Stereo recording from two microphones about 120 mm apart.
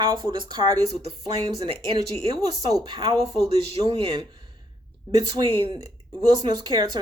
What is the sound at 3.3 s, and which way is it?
Speech, 55° right (ahead or behind).